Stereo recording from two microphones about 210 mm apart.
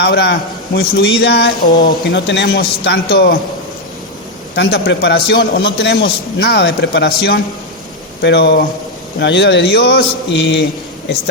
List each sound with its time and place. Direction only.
0.0 s a man's voice: 50° left (ahead or behind)
4.5 s a man's voice: 55° left (ahead or behind)